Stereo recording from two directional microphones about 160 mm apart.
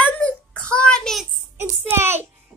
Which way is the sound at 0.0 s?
10° left (ahead or behind).